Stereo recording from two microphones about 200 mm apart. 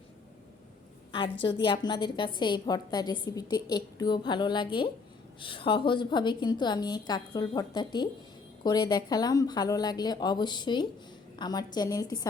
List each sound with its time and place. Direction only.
1.5 s a woman's voice: 25° left (ahead or behind)